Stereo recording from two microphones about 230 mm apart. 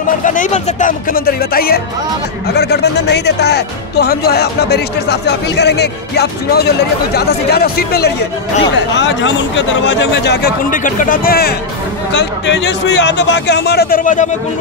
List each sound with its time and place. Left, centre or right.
0.2 s speech: left